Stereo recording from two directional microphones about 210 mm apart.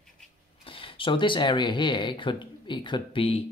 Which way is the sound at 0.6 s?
25° left (ahead or behind).